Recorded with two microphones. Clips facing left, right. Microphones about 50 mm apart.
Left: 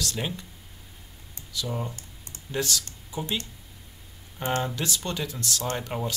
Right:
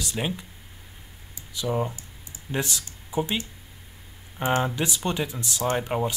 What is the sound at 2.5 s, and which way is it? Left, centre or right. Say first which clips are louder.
Speech: even; right.